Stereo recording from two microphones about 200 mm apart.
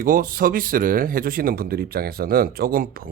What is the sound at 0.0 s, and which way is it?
Speech, 45° right (ahead or behind).